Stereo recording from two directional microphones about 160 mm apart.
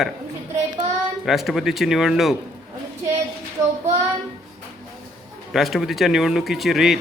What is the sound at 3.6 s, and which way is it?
Child singing, 20° right (ahead or behind).